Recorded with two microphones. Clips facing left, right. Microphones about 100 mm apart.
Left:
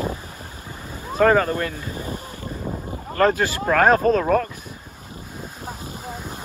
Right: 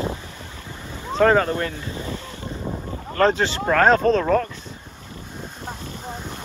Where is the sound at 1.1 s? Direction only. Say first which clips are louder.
Even; 30° right (ahead or behind).